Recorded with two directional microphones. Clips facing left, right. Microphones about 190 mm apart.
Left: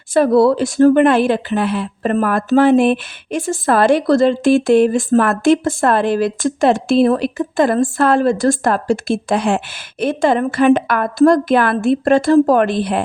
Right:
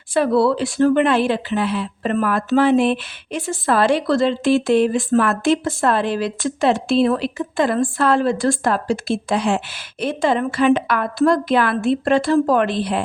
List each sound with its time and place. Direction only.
0.1 s a woman's voice: 45° left (ahead or behind)